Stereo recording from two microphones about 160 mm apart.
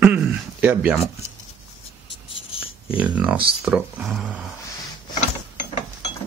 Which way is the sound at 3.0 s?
10° right (ahead or behind).